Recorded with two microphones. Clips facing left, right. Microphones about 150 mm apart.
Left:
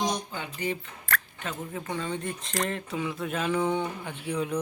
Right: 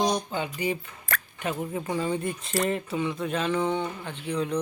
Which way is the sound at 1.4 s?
15° right (ahead or behind).